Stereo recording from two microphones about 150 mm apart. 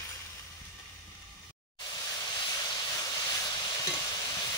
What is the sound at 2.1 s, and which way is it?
Vehicle, 30° left (ahead or behind).